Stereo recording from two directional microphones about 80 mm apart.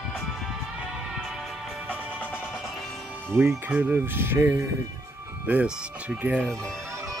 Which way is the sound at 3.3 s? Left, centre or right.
Right.